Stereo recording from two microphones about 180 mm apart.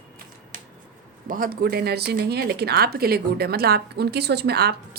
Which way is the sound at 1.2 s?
50° right (ahead or behind).